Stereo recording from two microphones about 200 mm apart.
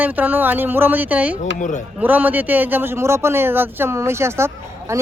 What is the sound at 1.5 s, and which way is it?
Speech, 40° left (ahead or behind).